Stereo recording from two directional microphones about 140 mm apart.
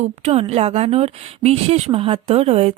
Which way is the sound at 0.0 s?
55° right (ahead or behind).